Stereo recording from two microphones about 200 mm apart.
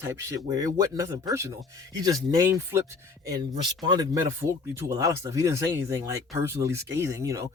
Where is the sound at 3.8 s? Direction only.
20° right (ahead or behind).